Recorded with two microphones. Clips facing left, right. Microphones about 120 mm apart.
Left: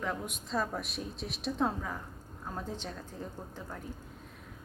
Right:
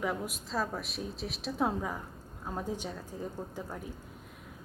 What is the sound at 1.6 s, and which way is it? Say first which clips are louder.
A woman's voice: right 3 dB; 10° right (ahead or behind).